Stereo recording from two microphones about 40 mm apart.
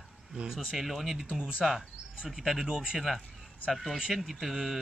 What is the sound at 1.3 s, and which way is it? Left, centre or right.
Speech, right.